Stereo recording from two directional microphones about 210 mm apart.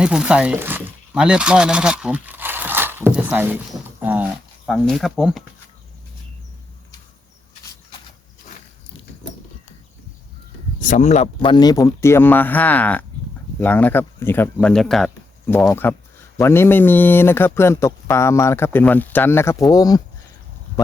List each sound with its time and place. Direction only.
0.0 s speech: 5° right (ahead or behind)
10.8 s speech: 35° left (ahead or behind); by 20.0 s 20° left (ahead or behind)